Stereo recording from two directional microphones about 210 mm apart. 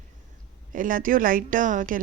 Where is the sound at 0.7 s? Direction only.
40° right (ahead or behind).